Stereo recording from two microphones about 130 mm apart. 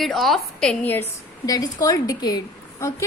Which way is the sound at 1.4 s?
30° left (ahead or behind).